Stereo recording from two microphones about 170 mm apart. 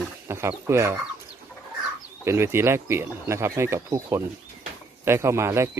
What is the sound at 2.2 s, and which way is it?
Speech, 15° right (ahead or behind).